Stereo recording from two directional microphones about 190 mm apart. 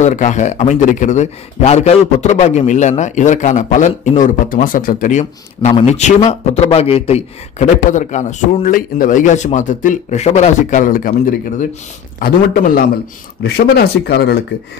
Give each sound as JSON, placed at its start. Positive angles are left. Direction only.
{"t": 0.0, "sound": "a man's voice", "side_deg": 40}
{"t": 5.2, "sound": "a man's voice", "side_deg": 30}